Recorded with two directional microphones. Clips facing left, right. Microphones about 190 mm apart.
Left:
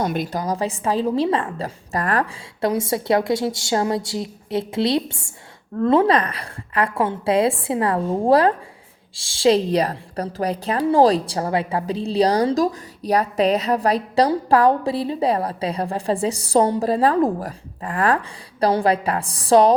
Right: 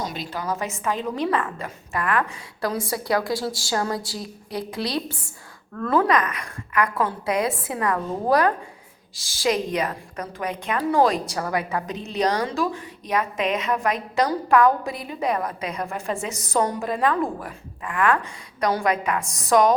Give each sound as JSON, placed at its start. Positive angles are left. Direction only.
{"t": 0.0, "sound": "a woman's voice", "side_deg": 55}
{"t": 2.6, "sound": "a woman's voice", "side_deg": 25}